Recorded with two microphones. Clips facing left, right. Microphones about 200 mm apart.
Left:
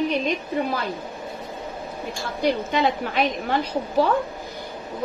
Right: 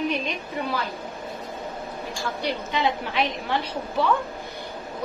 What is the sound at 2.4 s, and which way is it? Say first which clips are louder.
A woman's voice: left 5 dB; 45° left (ahead or behind).